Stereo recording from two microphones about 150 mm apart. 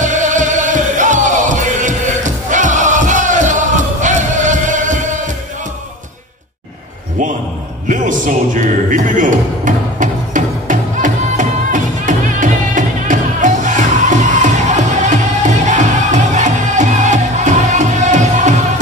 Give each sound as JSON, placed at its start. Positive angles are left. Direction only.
{"t": 0.0, "sound": "music", "side_deg": -55}
{"t": 7.9, "sound": "music", "side_deg": -60}